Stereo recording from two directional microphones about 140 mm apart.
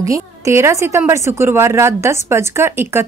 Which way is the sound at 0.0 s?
20° right (ahead or behind).